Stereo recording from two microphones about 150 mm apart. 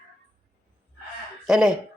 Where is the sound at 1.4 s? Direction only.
5° right (ahead or behind).